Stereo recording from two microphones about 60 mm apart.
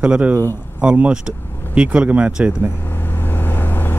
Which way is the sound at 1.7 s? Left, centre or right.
Right.